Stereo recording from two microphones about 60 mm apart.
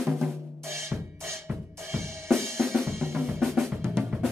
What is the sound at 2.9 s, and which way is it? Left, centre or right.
Drum kit, right.